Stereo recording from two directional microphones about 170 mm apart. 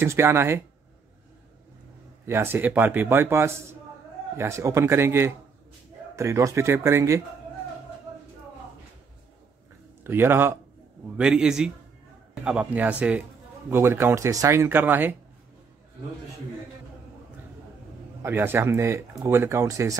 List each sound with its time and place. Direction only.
0.0 s speech: 15° right (ahead or behind)
2.2 s speech: 15° right (ahead or behind)
10.0 s speech: 15° right (ahead or behind)
18.2 s speech: 15° right (ahead or behind)